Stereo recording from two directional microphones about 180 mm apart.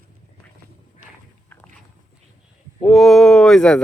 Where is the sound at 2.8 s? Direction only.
Centre (ahead or behind).